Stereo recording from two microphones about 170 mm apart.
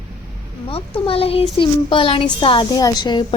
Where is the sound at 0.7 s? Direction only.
35° left (ahead or behind).